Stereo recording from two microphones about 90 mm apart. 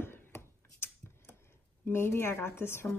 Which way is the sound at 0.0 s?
25° left (ahead or behind).